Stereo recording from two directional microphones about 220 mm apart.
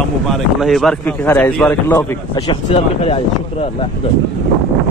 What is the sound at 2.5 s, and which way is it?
Speech, 25° left (ahead or behind).